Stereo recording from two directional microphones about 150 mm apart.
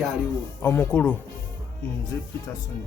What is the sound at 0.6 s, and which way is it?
Speech, 15° left (ahead or behind).